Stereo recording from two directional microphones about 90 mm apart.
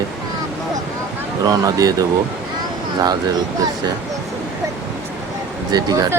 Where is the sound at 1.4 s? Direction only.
45° right (ahead or behind).